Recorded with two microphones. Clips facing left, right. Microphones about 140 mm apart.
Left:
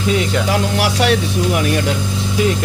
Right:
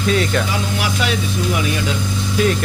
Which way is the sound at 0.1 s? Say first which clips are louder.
Even; 20° left (ahead or behind).